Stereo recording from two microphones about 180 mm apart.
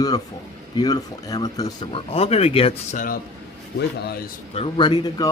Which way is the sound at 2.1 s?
35° left (ahead or behind).